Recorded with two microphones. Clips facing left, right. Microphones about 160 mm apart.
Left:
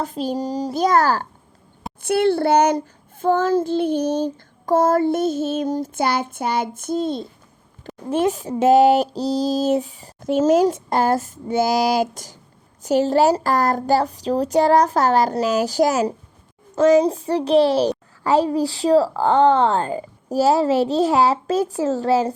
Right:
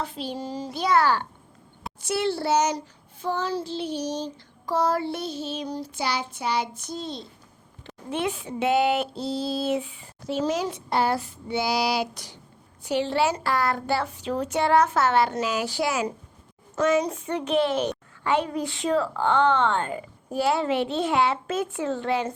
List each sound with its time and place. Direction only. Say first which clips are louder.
0.0 s a child's voice: left 8 dB; 45° left (ahead or behind)
2.0 s a child's voice: left 8 dB; 55° left (ahead or behind); by 22.3 s 40° left (ahead or behind)